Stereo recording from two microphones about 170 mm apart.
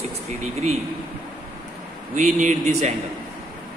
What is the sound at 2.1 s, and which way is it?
Speech, 45° right (ahead or behind).